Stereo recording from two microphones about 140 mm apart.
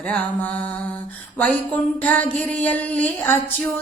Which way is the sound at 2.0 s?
10° left (ahead or behind).